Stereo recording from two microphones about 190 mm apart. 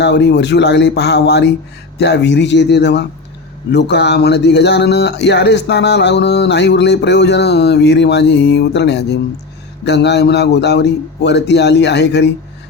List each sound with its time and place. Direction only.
0.0 s speech: 65° left (ahead or behind)